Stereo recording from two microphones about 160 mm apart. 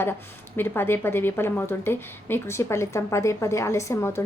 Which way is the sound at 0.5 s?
15° left (ahead or behind).